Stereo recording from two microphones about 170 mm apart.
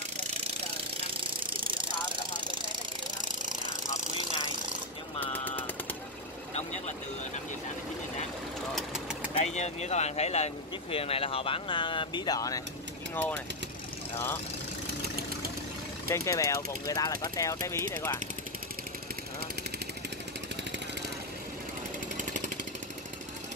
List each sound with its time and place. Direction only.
3.2 s jackhammer: 25° right (ahead or behind)
5.2 s a sound: 10° left (ahead or behind)
8.7 s vehicle: 5° right (ahead or behind)
9.4 s speech: 40° left (ahead or behind); by 12.6 s 20° left (ahead or behind)
14.1 s speech: 15° left (ahead or behind)
14.9 s engine: 65° right (ahead or behind)
16.1 s speech: 20° left (ahead or behind)